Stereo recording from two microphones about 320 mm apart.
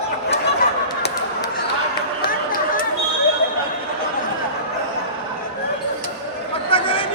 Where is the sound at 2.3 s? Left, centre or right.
Left.